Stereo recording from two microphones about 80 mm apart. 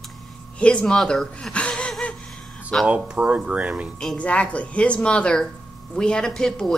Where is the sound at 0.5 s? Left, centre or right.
Centre.